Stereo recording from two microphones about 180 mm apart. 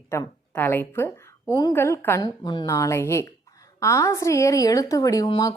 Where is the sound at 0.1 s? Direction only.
10° left (ahead or behind).